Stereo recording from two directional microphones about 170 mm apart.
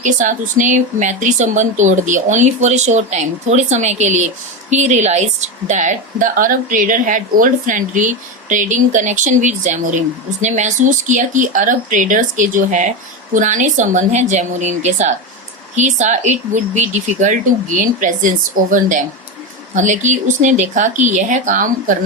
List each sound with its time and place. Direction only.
0.0 s a woman's voice: 45° right (ahead or behind)